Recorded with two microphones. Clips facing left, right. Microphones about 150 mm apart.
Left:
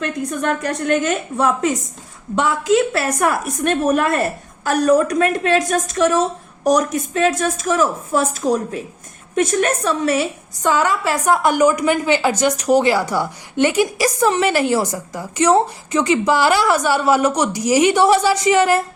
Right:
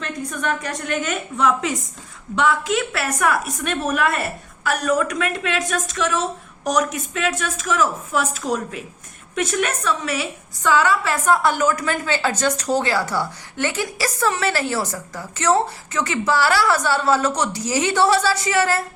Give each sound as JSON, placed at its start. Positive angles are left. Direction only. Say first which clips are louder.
{"t": 1.0, "sound": "a woman's voice", "louder": "left 3 dB", "side_deg": 40}
{"t": 2.4, "sound": "a woman's voice", "louder": "left 4 dB", "side_deg": 30}
{"t": 10.6, "sound": "a woman's voice", "louder": "left 1 dB", "side_deg": 15}